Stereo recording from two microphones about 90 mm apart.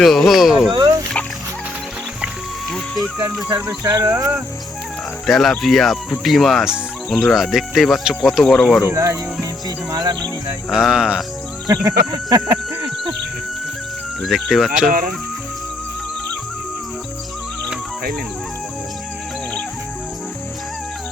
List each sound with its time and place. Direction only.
0.0 s speech: 5° left (ahead or behind)
0.7 s a sound: 45° right (ahead or behind)
2.6 s music: centre (ahead or behind)
3.8 s speech: 30° right (ahead or behind)
5.2 s speech: 5° left (ahead or behind)
8.9 s speech: 35° right (ahead or behind)
10.7 s speech: 5° right (ahead or behind)
11.7 s a sound: 40° right (ahead or behind)
14.2 s speech: centre (ahead or behind)